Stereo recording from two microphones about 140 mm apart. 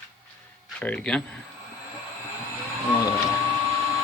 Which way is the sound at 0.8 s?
10° left (ahead or behind).